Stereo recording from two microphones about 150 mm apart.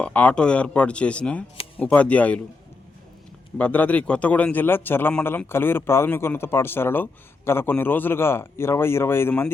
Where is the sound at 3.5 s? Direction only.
10° left (ahead or behind).